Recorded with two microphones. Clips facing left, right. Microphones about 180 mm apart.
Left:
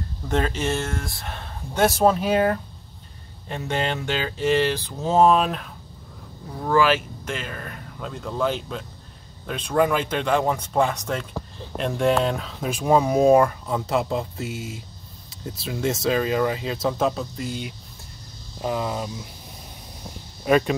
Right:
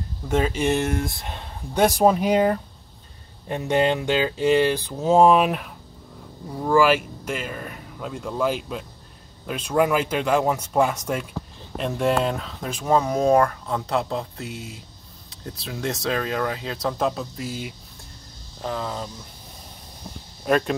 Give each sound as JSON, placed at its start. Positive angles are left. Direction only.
{"t": 0.3, "sound": "speech", "side_deg": -10}
{"t": 18.6, "sound": "speech", "side_deg": 10}
{"t": 20.4, "sound": "speech", "side_deg": 0}